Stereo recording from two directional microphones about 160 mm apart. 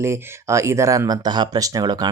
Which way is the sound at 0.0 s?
20° right (ahead or behind).